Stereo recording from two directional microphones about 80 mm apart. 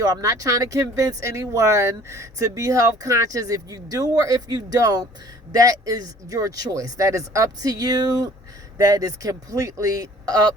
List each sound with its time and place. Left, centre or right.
0.0 s speech: right